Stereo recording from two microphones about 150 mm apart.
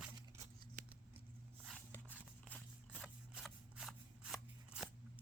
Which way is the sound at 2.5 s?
10° left (ahead or behind).